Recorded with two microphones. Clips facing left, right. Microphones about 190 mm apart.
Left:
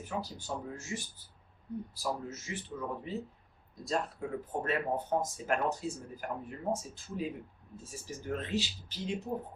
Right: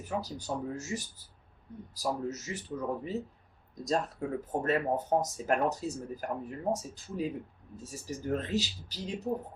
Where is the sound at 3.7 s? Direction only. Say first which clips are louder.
Right 3 dB; 40° right (ahead or behind).